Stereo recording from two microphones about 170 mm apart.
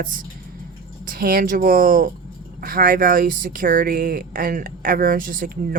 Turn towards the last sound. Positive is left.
turn(degrees=-55)  # may be behind; listen again after turning